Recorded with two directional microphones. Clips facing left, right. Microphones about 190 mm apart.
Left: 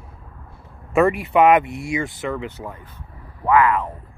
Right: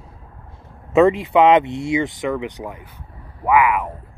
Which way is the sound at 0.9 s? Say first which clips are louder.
Right 3 dB; 20° right (ahead or behind).